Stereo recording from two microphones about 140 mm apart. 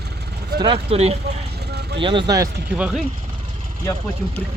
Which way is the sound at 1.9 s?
35° right (ahead or behind).